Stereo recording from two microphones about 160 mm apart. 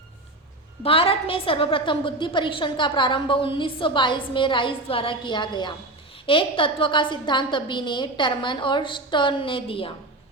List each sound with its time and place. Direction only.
0.8 s a woman's voice: 35° left (ahead or behind)